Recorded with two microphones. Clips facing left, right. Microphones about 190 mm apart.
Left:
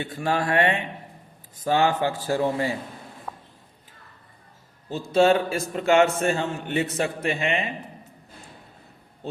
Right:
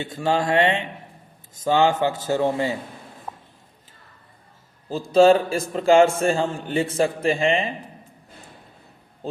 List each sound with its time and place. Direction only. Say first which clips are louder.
0.0 s a man's voice: right 3 dB; 25° right (ahead or behind)
3.3 s a sound: right 1 dB; 25° right (ahead or behind)
5.1 s a man's voice: right 4 dB; 30° right (ahead or behind)